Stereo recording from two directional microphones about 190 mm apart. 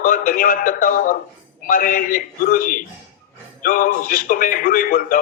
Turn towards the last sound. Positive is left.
turn(degrees=45)  # may be behind; listen again after turning